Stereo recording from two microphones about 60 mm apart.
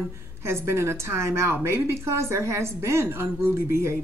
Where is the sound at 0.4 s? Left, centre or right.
Right.